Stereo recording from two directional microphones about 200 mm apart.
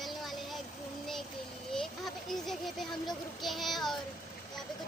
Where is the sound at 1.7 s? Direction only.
Centre (ahead or behind).